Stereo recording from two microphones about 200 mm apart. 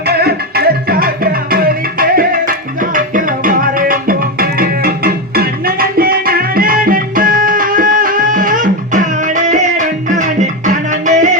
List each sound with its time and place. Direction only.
0.1 s music: 50° right (ahead or behind)